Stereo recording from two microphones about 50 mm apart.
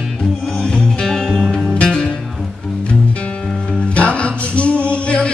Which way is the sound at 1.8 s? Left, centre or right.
Centre.